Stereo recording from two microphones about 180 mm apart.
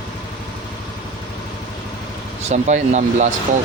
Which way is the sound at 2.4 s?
40° right (ahead or behind).